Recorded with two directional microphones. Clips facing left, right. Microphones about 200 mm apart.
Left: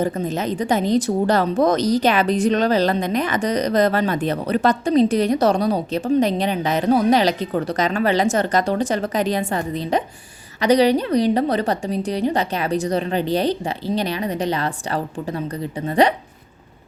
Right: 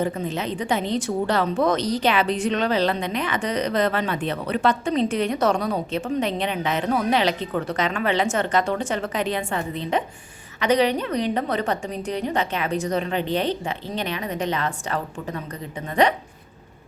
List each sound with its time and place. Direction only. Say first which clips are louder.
0.0 s a woman's voice: left 3 dB; 40° left (ahead or behind)